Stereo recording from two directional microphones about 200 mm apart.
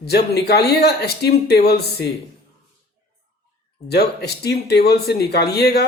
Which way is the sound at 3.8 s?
55° left (ahead or behind).